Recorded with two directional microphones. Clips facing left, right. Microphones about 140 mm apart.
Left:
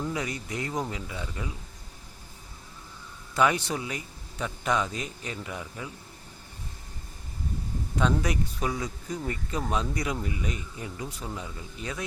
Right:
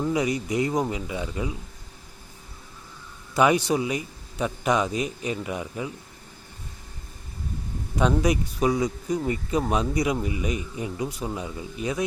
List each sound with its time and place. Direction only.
0.0 s a man's voice: 15° right (ahead or behind)
3.3 s a man's voice: 15° right (ahead or behind)
7.9 s a man's voice: 15° right (ahead or behind)